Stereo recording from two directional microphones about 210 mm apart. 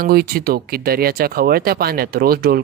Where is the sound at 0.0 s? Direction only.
45° right (ahead or behind).